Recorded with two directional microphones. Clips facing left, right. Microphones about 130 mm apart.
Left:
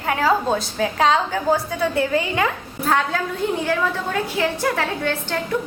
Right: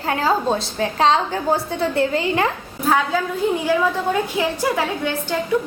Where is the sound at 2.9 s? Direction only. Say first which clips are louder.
Right 2 dB; 5° right (ahead or behind).